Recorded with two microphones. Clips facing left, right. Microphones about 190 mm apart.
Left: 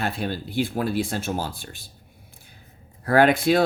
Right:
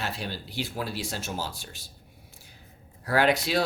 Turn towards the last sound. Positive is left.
turn(degrees=50)  # may be behind; listen again after turning